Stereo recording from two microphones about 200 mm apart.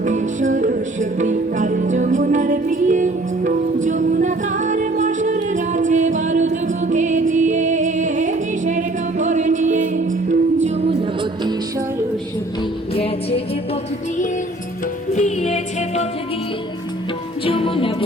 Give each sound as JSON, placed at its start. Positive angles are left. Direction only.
{"t": 0.0, "sound": "music", "side_deg": -40}
{"t": 12.9, "sound": "music", "side_deg": 30}
{"t": 15.1, "sound": "music", "side_deg": 35}
{"t": 17.4, "sound": "music", "side_deg": 25}